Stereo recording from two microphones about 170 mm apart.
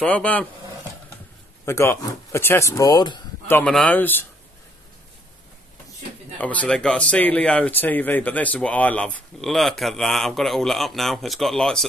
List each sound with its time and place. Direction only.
0.0 s speech: 5° left (ahead or behind)
1.7 s speech: 15° left (ahead or behind)
3.4 s speech: 10° left (ahead or behind)
6.3 s speech: 10° left (ahead or behind)